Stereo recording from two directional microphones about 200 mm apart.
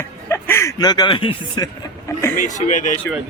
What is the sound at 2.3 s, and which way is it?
Speech, 40° left (ahead or behind).